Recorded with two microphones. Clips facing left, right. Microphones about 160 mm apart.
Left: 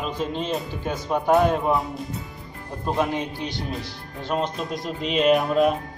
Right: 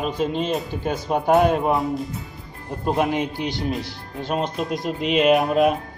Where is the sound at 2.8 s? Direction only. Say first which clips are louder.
Right 3 dB; 20° right (ahead or behind).